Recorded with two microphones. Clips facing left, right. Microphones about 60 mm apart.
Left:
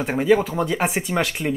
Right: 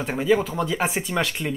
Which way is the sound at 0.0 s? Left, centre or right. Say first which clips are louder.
Left 3 dB; centre.